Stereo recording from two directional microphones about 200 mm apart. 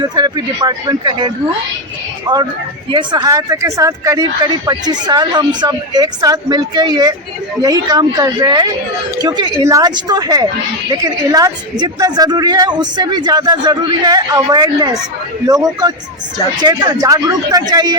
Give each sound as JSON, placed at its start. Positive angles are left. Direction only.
{"t": 0.0, "sound": "a woman's voice", "side_deg": -20}